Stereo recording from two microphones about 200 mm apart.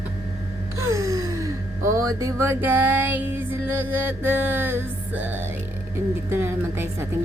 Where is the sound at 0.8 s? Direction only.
15° right (ahead or behind).